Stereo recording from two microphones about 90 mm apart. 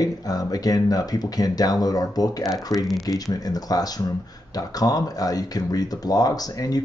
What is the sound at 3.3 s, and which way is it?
Speech, 45° left (ahead or behind).